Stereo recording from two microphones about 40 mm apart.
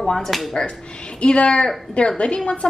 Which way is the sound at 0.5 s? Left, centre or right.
Left.